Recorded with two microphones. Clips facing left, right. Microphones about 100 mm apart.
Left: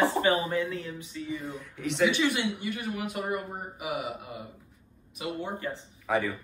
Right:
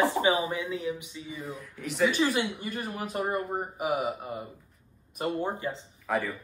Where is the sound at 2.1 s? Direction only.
35° right (ahead or behind).